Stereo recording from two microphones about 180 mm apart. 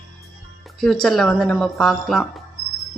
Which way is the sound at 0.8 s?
5° left (ahead or behind).